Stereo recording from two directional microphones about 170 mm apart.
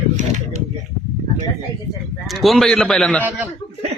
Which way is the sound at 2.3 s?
Centre (ahead or behind).